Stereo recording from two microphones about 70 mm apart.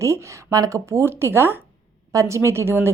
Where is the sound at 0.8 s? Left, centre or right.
Right.